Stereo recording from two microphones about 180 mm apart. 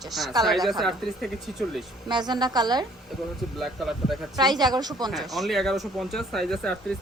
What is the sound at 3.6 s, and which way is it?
Speech, centre (ahead or behind).